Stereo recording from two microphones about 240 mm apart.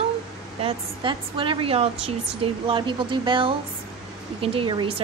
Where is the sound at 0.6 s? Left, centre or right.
Right.